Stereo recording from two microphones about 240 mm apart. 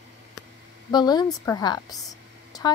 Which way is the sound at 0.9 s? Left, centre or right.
Centre.